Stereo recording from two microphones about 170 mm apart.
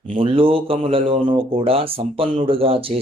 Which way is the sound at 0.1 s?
30° right (ahead or behind).